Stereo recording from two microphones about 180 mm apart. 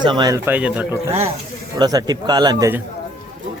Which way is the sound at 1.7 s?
20° right (ahead or behind).